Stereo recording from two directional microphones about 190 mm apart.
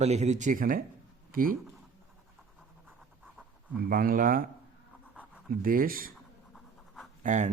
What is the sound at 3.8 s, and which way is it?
Speech, 50° right (ahead or behind).